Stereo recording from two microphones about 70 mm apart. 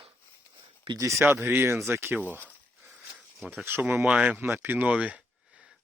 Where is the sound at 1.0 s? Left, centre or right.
Right.